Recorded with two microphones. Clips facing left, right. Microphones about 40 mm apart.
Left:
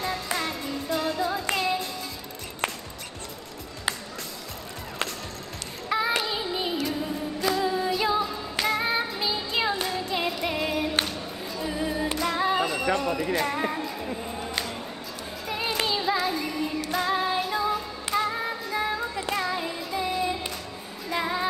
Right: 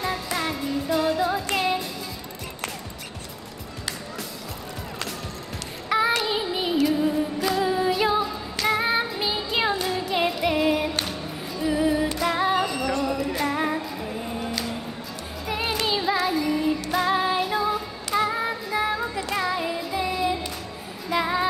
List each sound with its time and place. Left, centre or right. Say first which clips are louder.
0.0 s music: right 2 dB; centre
5.9 s child singing: right 4 dB; centre
6.4 s music: right 5 dB; centre
7.6 s female singing: right 3 dB; centre
8.6 s music: right 4 dB; centre
10.3 s singing: right 5 dB; centre
11.1 s music: right 2 dB; centre
12.5 s music: right 1 dB; centre
17.1 s female singing: right 3 dB; centre
18.4 s music: right 3 dB; centre